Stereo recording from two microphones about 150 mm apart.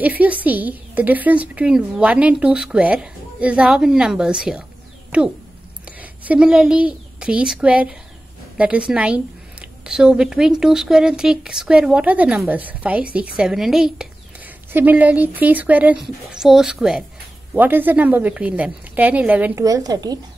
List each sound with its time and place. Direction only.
0.0 s a woman's voice: 10° right (ahead or behind)
19.6 s a woman's voice: 25° right (ahead or behind)